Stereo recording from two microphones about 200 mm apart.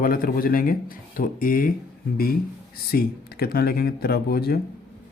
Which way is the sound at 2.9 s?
50° left (ahead or behind).